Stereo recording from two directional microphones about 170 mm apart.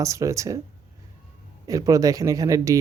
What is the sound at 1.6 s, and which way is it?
Speech, 20° right (ahead or behind).